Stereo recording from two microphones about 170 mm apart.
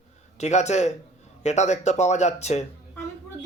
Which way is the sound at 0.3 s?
40° left (ahead or behind).